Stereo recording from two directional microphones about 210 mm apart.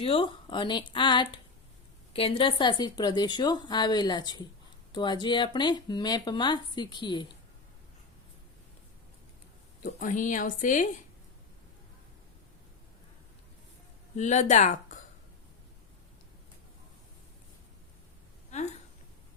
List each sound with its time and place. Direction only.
0.0 s speech: 25° left (ahead or behind)
9.8 s speech: 40° left (ahead or behind)
14.2 s speech: 35° left (ahead or behind)